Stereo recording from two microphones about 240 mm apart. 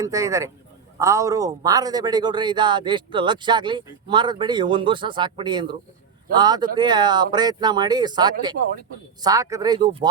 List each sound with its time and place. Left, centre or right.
0.0 s speech: centre